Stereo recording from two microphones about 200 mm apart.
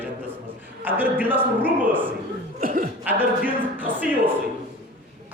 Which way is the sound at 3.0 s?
10° right (ahead or behind).